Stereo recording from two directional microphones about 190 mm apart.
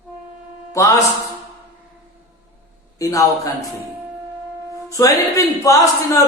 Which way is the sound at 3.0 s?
15° left (ahead or behind).